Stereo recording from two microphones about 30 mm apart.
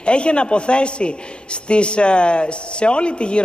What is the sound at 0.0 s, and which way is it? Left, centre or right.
A man's voice, left.